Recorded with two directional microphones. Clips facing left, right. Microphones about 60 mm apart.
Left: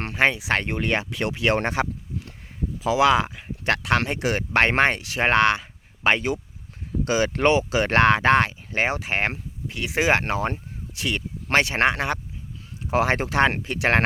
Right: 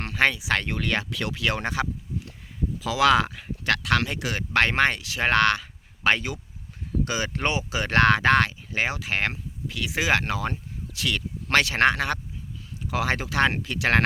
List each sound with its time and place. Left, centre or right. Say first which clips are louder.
0.2 s speech: left 2 dB; left
2.8 s speech: left 2 dB; left
3.7 s speech: left 2 dB; left
5.3 s speech: left 1 dB; left
8.0 s speech: even; left
12.9 s speech: left 5 dB; left